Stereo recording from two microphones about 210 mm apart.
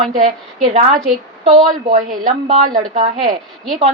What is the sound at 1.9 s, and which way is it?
A woman's voice, 40° right (ahead or behind).